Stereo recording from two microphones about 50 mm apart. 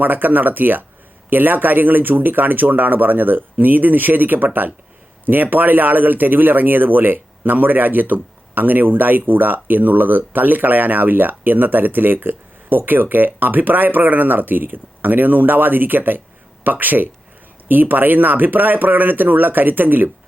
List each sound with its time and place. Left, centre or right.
0.0 s speech: right